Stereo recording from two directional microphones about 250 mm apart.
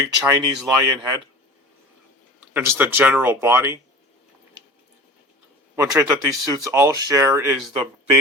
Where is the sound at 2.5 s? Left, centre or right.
Centre.